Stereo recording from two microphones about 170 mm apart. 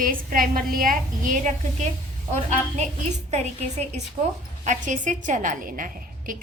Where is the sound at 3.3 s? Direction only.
40° right (ahead or behind).